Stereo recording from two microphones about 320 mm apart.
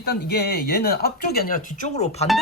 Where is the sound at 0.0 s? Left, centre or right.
Left.